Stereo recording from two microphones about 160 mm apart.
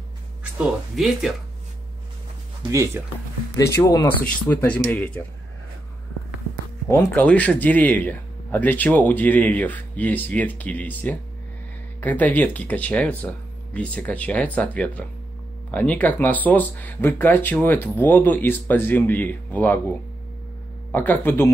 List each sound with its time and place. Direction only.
0.4 s speech: 5° right (ahead or behind)
2.7 s speech: 20° right (ahead or behind)
3.5 s speech: 20° left (ahead or behind)
4.5 s speech: 10° left (ahead or behind)
6.9 s speech: 15° left (ahead or behind)
20.9 s speech: 10° left (ahead or behind)